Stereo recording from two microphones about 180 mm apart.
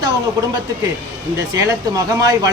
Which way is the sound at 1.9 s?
20° right (ahead or behind).